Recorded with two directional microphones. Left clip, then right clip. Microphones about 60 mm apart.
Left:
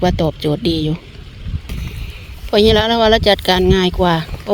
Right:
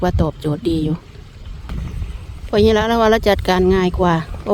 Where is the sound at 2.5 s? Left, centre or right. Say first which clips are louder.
Left 2 dB; right.